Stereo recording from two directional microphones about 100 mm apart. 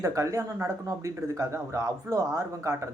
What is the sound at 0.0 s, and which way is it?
Speech, 35° right (ahead or behind).